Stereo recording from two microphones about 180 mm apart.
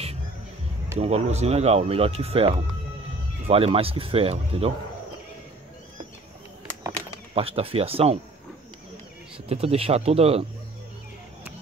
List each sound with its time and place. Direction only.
0.9 s speech: 35° right (ahead or behind)
7.3 s speech: 30° right (ahead or behind)
9.5 s speech: 35° right (ahead or behind)